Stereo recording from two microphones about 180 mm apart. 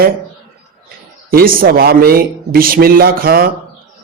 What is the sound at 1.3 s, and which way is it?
A man's voice, 55° right (ahead or behind).